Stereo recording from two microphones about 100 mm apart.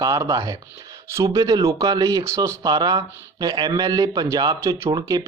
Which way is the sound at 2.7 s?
40° right (ahead or behind).